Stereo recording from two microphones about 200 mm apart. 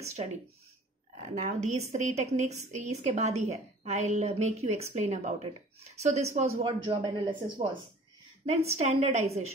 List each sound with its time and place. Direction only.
1.1 s a woman's voice: 35° right (ahead or behind)
8.7 s a woman's voice: 30° right (ahead or behind)